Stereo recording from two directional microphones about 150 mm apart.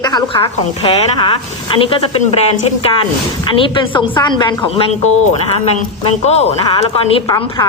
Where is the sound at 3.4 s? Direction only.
35° left (ahead or behind).